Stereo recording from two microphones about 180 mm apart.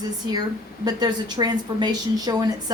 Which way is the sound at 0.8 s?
20° right (ahead or behind).